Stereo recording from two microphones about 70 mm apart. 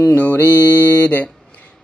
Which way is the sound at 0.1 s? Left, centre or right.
Centre.